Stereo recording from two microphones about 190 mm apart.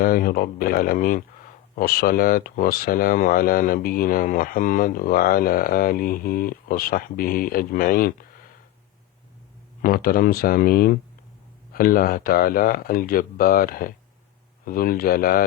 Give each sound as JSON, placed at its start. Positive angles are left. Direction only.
{"t": 0.0, "sound": "speech", "side_deg": 50}
{"t": 9.8, "sound": "speech", "side_deg": 50}